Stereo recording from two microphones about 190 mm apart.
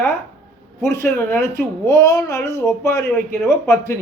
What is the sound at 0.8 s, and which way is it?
Speech, 15° left (ahead or behind).